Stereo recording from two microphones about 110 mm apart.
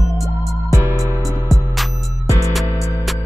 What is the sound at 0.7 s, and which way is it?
Music, 30° right (ahead or behind).